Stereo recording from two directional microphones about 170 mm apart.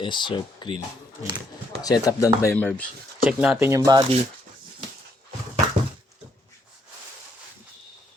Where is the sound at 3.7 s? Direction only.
20° right (ahead or behind).